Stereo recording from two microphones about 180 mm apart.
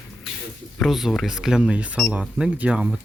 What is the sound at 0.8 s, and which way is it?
Speech, centre (ahead or behind).